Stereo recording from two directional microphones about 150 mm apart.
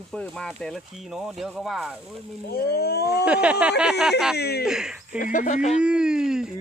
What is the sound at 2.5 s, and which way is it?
Speech, 90° left.